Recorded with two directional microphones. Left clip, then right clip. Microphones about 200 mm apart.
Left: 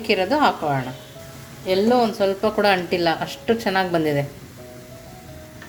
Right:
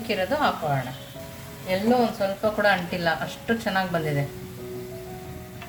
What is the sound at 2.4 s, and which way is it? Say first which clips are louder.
A woman's voice: left 1 dB; 40° left (ahead or behind).